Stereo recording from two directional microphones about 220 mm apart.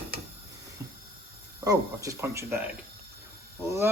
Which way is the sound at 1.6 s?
15° right (ahead or behind).